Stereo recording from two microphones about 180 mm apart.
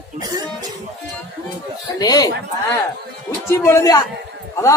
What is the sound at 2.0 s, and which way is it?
Speech, 20° left (ahead or behind).